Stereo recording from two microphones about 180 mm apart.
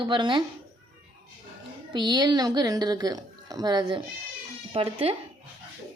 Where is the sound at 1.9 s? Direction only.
25° right (ahead or behind).